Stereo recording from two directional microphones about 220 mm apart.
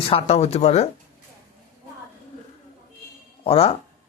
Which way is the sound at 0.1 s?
30° left (ahead or behind).